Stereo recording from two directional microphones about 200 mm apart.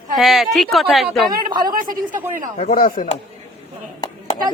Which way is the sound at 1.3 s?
20° right (ahead or behind).